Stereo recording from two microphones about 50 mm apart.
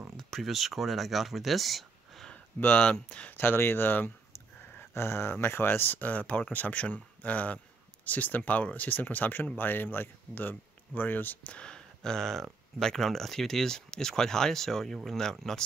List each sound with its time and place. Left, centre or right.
0.3 s speech: centre
2.3 s a sound: left
2.9 s speech: left
3.3 s speech: left
4.7 s speech: left
11.5 s speech: centre